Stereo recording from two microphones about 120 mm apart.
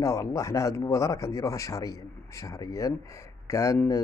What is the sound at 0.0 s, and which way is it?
Speech, 25° left (ahead or behind).